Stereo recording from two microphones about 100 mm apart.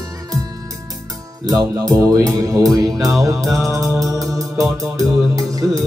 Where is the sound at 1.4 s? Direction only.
40° right (ahead or behind).